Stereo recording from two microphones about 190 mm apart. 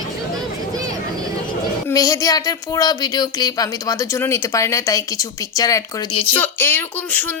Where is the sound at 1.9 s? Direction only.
15° left (ahead or behind).